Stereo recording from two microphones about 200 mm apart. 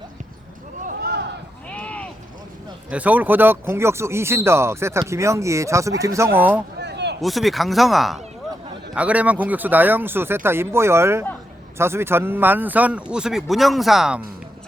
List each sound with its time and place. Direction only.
1.7 s sheep: 5° left (ahead or behind)
2.9 s speech: 5° right (ahead or behind)
6.7 s a sound: 60° right (ahead or behind)
7.2 s speech: centre (ahead or behind)